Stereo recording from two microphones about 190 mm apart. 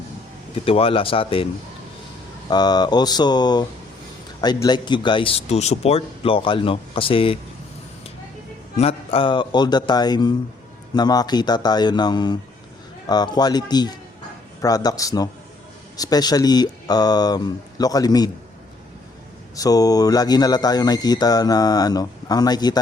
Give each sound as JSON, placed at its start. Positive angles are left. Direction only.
{"t": 0.5, "sound": "speech", "side_deg": 30}
{"t": 2.5, "sound": "speech", "side_deg": 20}
{"t": 8.8, "sound": "speech", "side_deg": 30}
{"t": 19.5, "sound": "speech", "side_deg": 20}